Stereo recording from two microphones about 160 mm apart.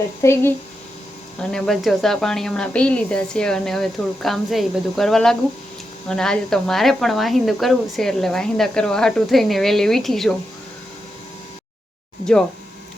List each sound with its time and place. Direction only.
0.2 s speech: 15° left (ahead or behind)
1.4 s speech: 5° left (ahead or behind)
12.2 s speech: 5° left (ahead or behind)